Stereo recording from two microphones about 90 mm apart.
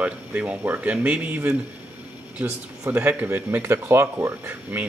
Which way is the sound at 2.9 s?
20° right (ahead or behind).